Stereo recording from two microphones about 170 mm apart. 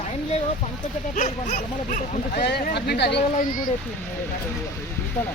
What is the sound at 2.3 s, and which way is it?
Speech, 70° left (ahead or behind).